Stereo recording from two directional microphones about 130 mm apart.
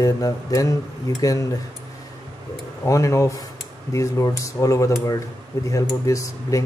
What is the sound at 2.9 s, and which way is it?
Speech, 25° left (ahead or behind).